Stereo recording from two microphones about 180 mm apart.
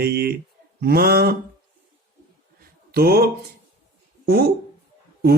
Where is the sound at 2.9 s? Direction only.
60° right (ahead or behind).